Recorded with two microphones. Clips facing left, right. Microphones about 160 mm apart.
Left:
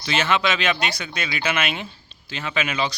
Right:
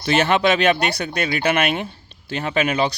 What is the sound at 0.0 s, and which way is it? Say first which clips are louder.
Speech: right 5 dB; 50° right (ahead or behind).